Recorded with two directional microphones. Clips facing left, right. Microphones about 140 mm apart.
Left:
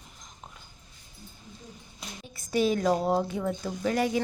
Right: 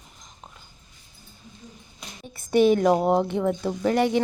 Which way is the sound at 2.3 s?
60° right (ahead or behind).